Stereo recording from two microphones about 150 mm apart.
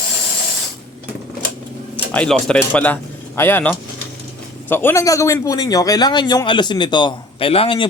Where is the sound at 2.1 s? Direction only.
10° left (ahead or behind).